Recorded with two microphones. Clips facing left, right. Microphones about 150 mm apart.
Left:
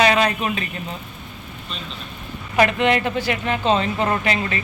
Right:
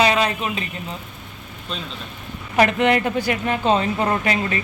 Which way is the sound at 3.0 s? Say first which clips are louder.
Right 1 dB; 40° right (ahead or behind).